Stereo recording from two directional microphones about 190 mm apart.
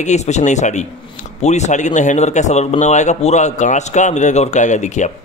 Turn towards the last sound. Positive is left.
turn(degrees=40)  # may be behind; listen again after turning